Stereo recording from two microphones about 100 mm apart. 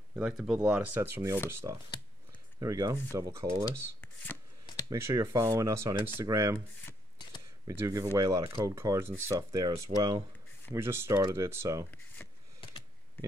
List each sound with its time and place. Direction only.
0.1 s speech: 10° right (ahead or behind)
1.1 s speech: 30° right (ahead or behind)
4.0 s shuffling cards: 20° left (ahead or behind)
4.8 s speech: 30° right (ahead or behind)
7.6 s speech: 35° right (ahead or behind)
10.7 s speech: 25° right (ahead or behind)